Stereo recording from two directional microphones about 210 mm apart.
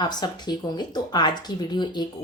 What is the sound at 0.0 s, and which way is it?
Speech, 20° left (ahead or behind).